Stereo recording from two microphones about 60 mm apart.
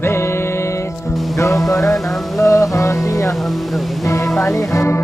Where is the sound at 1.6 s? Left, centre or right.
Centre.